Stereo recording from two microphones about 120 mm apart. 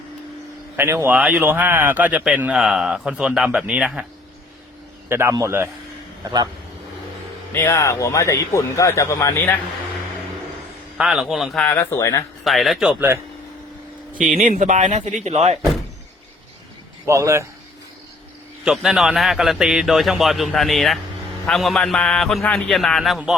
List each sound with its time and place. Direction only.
0.8 s speech: 20° right (ahead or behind)
5.0 s a man's voice: 20° right (ahead or behind)
7.5 s speech: 20° left (ahead or behind)
10.9 s a man's voice: 5° right (ahead or behind)
11.8 s speech: 25° left (ahead or behind)
12.5 s a man's voice: centre (ahead or behind)
12.9 s speech: 15° right (ahead or behind)
14.2 s a man's voice: 90° right; by 15.5 s 65° right (ahead or behind)
17.1 s speech: 25° right (ahead or behind)
18.6 s a man's voice: 5° right (ahead or behind)